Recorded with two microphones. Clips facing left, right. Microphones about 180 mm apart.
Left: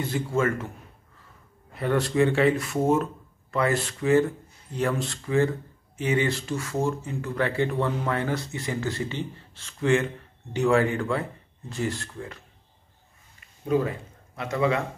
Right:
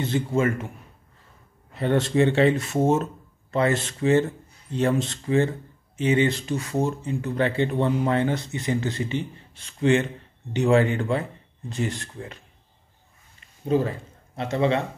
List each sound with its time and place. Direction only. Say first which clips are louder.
0.0 s a man's voice: right 2 dB; 20° right (ahead or behind)
1.8 s speech: right 2 dB; 25° right (ahead or behind)
13.7 s a man's voice: right 1 dB; 30° right (ahead or behind)